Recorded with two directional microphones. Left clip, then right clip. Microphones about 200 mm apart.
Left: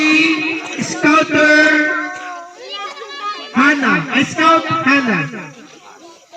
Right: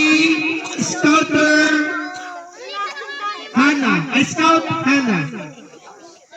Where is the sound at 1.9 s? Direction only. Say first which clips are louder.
Left 5 dB; 45° right (ahead or behind).